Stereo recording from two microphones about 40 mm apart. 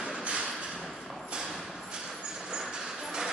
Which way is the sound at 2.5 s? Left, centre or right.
Centre.